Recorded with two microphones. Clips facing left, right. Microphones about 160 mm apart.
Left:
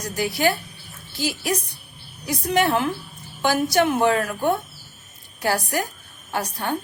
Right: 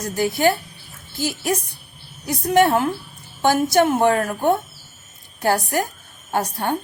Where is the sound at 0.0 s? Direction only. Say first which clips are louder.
Right 3 dB; 50° right (ahead or behind).